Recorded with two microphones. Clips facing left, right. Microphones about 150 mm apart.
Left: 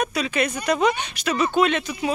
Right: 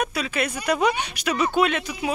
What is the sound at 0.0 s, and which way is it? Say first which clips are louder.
Speech: left 2 dB; 5° right (ahead or behind).